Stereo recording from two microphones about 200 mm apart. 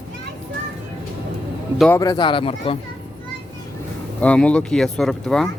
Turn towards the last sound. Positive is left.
turn(degrees=0)  # may be behind; listen again after turning